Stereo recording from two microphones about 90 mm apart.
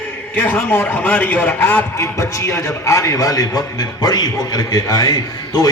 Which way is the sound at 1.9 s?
35° left (ahead or behind).